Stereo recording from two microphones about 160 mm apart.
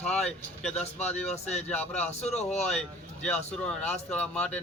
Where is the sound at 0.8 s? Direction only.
45° left (ahead or behind).